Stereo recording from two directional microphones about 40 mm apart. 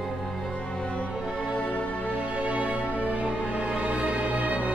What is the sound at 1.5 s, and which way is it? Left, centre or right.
Music, left.